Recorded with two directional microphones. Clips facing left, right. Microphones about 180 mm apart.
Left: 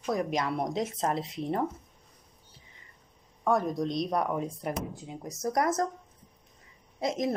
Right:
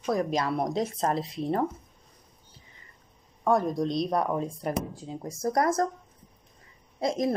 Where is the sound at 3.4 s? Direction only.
30° right (ahead or behind).